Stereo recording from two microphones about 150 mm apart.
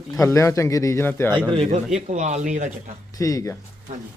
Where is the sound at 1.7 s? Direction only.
55° right (ahead or behind).